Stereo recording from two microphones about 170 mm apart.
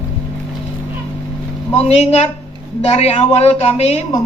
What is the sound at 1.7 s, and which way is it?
A woman's voice, 40° left (ahead or behind).